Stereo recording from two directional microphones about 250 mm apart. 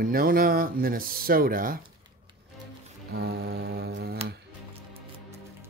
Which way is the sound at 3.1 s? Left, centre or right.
Right.